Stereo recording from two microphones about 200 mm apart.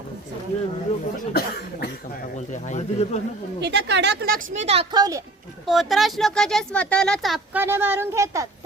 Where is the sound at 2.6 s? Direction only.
35° left (ahead or behind).